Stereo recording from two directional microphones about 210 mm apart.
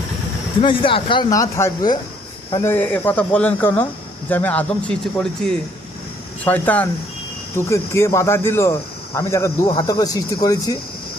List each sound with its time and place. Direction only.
0.6 s speech: 25° left (ahead or behind)